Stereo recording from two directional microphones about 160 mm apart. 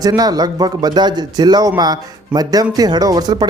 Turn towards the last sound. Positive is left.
turn(degrees=-25)  # may be behind; listen again after turning